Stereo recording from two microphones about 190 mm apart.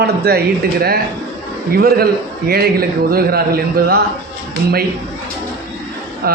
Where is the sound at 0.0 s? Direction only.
55° right (ahead or behind).